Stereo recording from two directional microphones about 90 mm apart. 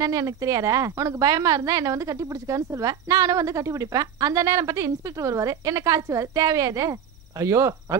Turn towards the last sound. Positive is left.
turn(degrees=-35)  # may be behind; listen again after turning